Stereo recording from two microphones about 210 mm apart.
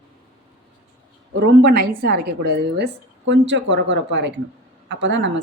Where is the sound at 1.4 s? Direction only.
50° right (ahead or behind).